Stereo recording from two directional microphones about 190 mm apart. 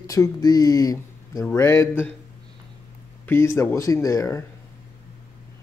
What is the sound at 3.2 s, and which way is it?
A man's voice, 15° left (ahead or behind).